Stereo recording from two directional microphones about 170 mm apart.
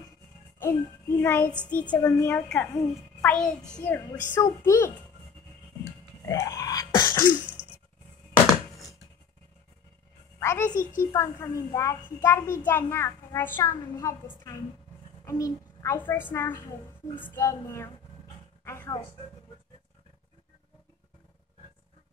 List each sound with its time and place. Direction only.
0.6 s a child's voice: 15° left (ahead or behind)
2.0 s a child's voice: 20° left (ahead or behind)
6.2 s throat clearing: 20° left (ahead or behind)
7.4 s a sound: 10° right (ahead or behind)
10.4 s a child's voice: 15° left (ahead or behind)